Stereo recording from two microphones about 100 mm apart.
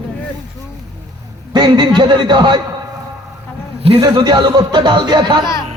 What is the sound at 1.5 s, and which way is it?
A man's voice, 45° right (ahead or behind).